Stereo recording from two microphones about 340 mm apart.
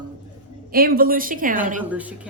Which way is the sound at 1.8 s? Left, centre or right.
Centre.